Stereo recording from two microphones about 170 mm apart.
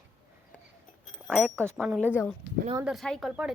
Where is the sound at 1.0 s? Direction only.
Centre (ahead or behind).